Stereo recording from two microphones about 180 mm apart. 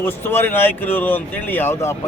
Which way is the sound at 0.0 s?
10° left (ahead or behind).